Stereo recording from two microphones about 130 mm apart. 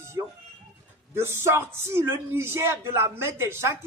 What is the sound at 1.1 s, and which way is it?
A man's voice, 20° right (ahead or behind).